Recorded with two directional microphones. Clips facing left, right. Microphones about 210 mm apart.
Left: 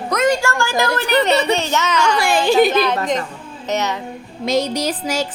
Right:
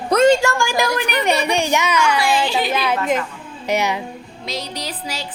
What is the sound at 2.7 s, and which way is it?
A woman's voice, 10° right (ahead or behind).